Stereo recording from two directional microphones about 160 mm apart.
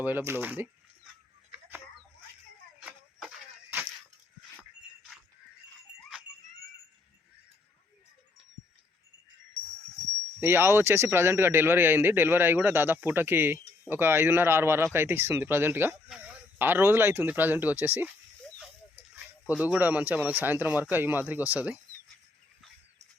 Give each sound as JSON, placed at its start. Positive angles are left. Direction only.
{"t": 0.0, "sound": "speech", "side_deg": -10}
{"t": 10.4, "sound": "speech", "side_deg": -15}
{"t": 19.1, "sound": "speech", "side_deg": -10}